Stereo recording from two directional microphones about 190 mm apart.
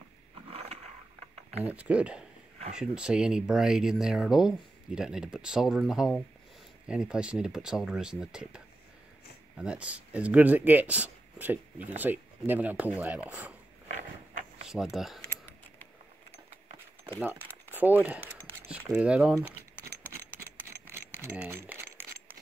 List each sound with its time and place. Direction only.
0.5 s roaring cats: 30° right (ahead or behind)
1.6 s speech: 5° right (ahead or behind)
14.7 s speech: centre (ahead or behind)
17.6 s speech: 10° right (ahead or behind)
19.3 s rattle: 10° right (ahead or behind)
21.1 s crumpling: 15° right (ahead or behind)